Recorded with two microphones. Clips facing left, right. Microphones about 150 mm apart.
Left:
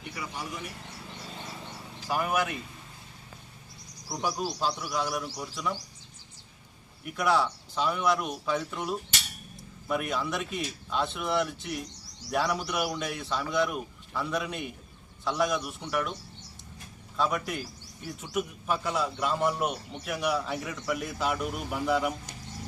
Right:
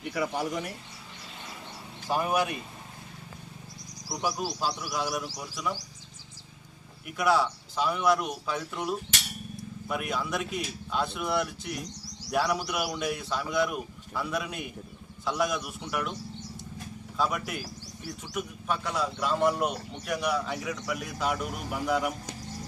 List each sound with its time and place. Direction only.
0.1 s speech: 90° right
2.0 s speech: 20° right (ahead or behind)
4.1 s a man's voice: 5° right (ahead or behind)
7.0 s a man's voice: centre (ahead or behind)
17.2 s a man's voice: centre (ahead or behind)